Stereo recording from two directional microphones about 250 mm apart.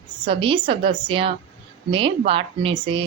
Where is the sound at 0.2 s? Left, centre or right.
Right.